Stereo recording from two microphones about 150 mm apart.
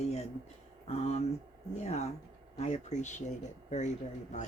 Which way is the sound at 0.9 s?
45° left (ahead or behind).